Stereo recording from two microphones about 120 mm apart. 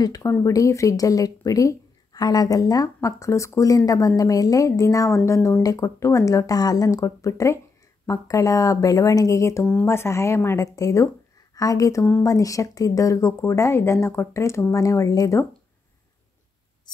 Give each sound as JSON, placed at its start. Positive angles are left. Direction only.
{"t": 0.0, "sound": "speech", "side_deg": 30}